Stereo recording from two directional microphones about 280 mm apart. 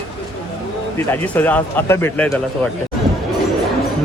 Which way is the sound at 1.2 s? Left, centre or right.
Centre.